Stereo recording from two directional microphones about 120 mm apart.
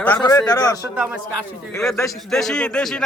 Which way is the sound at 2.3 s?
5° left (ahead or behind).